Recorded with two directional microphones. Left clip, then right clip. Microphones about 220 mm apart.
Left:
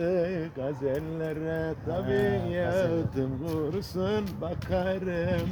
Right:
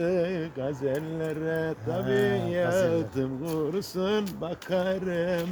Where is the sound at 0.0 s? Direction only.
10° right (ahead or behind).